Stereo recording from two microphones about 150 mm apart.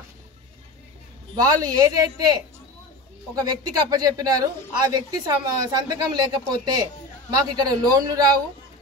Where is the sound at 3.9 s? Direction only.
25° right (ahead or behind).